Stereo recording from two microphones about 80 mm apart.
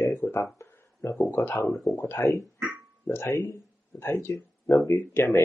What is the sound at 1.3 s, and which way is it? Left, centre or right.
Speech, left.